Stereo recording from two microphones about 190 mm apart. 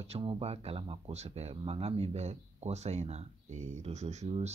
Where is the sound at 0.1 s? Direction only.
30° right (ahead or behind).